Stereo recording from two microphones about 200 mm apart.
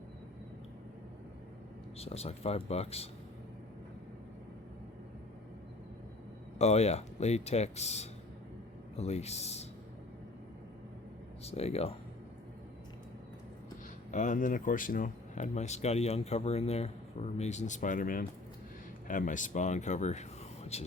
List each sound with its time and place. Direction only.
2.0 s speech: 30° left (ahead or behind)
6.6 s speech: 35° left (ahead or behind)
11.4 s speech: 30° left (ahead or behind)
14.1 s speech: 40° left (ahead or behind)